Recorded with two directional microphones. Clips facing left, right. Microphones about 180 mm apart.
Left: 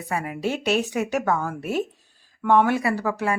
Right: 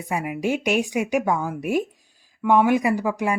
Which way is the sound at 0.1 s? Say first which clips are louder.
Right 2 dB; 15° right (ahead or behind).